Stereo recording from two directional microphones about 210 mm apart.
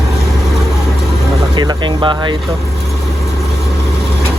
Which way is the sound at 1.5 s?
20° right (ahead or behind).